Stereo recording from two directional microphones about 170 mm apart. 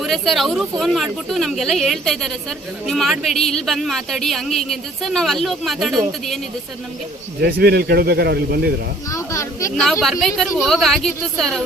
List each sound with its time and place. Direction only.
0.0 s speech: centre (ahead or behind)
7.4 s speech: 70° right (ahead or behind)
9.0 s speech: 20° left (ahead or behind)
9.7 s speech: centre (ahead or behind)